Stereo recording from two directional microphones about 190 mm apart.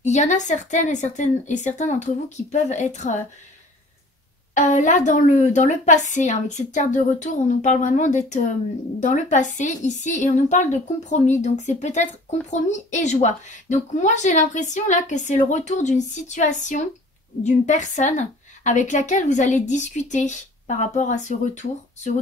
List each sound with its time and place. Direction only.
0.0 s speech: 40° left (ahead or behind)
4.6 s speech: 40° left (ahead or behind)